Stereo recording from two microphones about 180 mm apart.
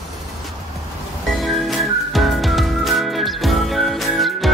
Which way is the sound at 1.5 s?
Centre (ahead or behind).